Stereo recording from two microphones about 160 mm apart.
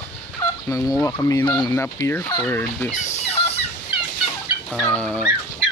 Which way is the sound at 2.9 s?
45° left (ahead or behind).